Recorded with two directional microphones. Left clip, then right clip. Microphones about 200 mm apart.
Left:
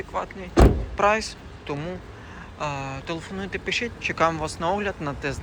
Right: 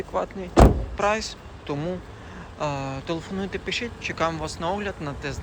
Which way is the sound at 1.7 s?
15° right (ahead or behind).